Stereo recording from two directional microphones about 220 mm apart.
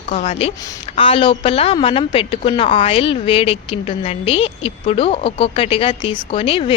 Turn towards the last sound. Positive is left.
turn(degrees=25)  # may be behind; listen again after turning